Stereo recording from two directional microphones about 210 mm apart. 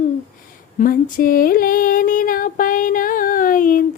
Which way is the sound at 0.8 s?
40° left (ahead or behind).